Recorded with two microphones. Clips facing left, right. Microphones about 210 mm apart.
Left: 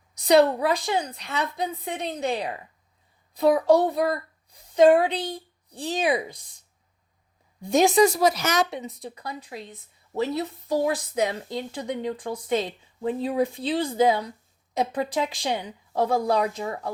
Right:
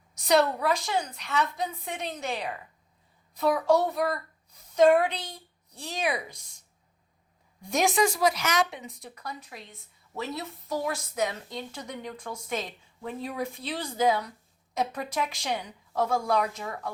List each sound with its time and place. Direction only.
0.3 s a woman's voice: 30° left (ahead or behind)
7.6 s a woman's voice: 30° left (ahead or behind)